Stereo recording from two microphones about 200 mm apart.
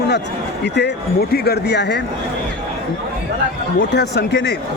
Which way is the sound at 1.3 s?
55° left (ahead or behind).